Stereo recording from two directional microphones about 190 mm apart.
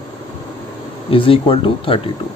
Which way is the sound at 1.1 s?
30° left (ahead or behind).